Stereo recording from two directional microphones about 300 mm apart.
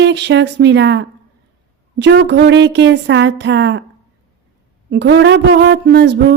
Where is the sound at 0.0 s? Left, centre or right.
Right.